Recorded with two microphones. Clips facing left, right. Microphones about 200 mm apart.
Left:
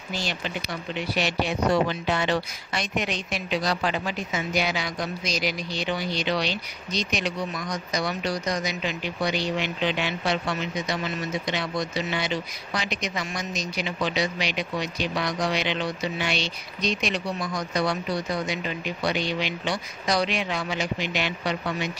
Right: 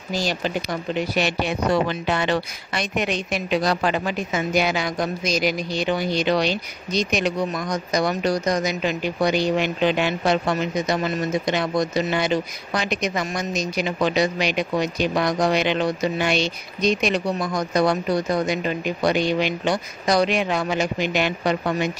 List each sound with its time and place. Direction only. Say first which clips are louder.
0.1 s speech: right 6 dB; 40° right (ahead or behind)
0.9 s speech: right 3 dB; 55° right (ahead or behind)